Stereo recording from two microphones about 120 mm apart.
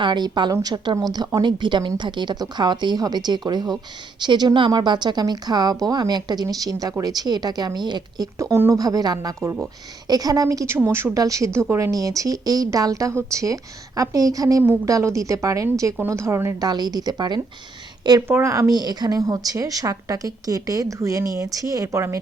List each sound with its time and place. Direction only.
0.0 s a woman's voice: 40° right (ahead or behind)
8.4 s a woman's voice: 25° right (ahead or behind)
16.6 s a woman's voice: 35° right (ahead or behind)
18.3 s a woman's voice: 20° right (ahead or behind)